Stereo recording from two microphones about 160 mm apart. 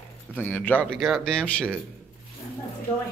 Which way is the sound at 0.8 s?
Centre (ahead or behind).